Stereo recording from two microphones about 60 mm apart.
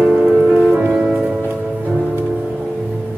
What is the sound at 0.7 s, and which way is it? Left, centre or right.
Music, right.